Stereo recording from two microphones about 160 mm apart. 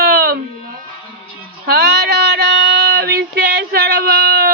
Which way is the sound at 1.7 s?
90° right.